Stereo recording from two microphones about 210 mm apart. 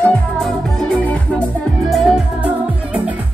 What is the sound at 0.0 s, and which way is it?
Music, 5° left (ahead or behind).